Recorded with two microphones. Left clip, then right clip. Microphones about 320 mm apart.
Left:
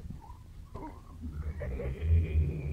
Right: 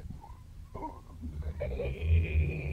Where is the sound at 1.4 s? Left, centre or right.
Right.